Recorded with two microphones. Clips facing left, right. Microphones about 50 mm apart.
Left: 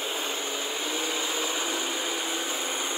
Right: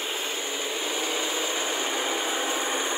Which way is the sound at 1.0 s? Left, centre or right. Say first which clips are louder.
Right 1 dB; right.